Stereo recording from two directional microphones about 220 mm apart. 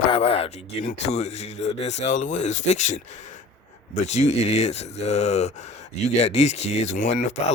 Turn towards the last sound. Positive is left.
turn(degrees=30)  # may be behind; listen again after turning